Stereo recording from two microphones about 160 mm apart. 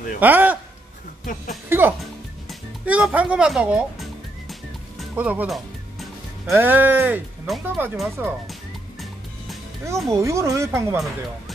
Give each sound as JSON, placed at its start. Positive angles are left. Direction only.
{"t": 0.2, "sound": "speech", "side_deg": -10}
{"t": 1.7, "sound": "speech", "side_deg": -15}
{"t": 2.8, "sound": "music", "side_deg": -10}
{"t": 6.5, "sound": "speech", "side_deg": -15}
{"t": 10.0, "sound": "speech", "side_deg": -20}